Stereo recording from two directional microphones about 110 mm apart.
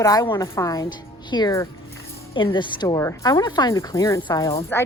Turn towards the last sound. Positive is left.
turn(degrees=35)  # may be behind; listen again after turning